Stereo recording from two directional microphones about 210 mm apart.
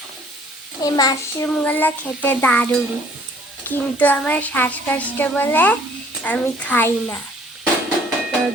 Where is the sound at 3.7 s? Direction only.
10° left (ahead or behind).